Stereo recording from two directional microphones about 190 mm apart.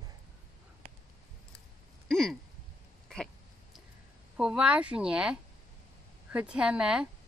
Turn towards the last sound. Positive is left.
turn(degrees=-5)  # may be behind; listen again after turning